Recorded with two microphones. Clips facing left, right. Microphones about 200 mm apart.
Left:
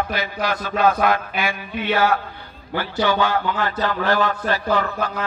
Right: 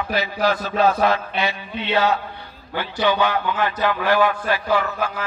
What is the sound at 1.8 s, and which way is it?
A man's voice, 25° right (ahead or behind).